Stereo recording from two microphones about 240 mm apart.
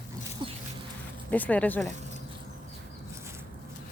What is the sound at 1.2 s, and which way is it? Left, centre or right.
Speech, centre.